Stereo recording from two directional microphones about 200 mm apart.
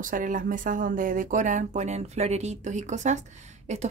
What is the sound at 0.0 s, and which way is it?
Speech, 40° right (ahead or behind).